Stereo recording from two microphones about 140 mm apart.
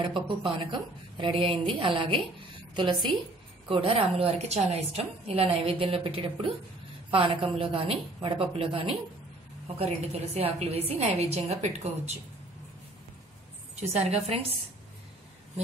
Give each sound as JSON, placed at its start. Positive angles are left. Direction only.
{"t": 0.0, "sound": "a woman's voice", "side_deg": -35}
{"t": 13.7, "sound": "a woman's voice", "side_deg": -50}